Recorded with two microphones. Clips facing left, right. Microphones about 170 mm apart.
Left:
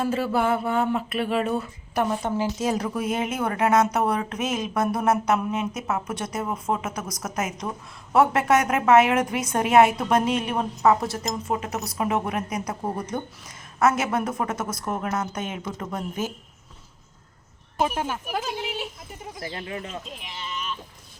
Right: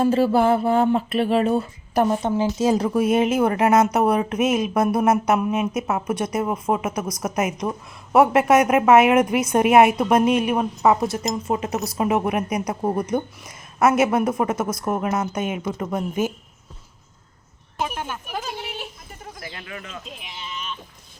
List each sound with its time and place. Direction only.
0.0 s music: 30° right (ahead or behind)
2.4 s speech: 30° right (ahead or behind)
19.4 s speech: 30° left (ahead or behind)
20.2 s sheep: centre (ahead or behind)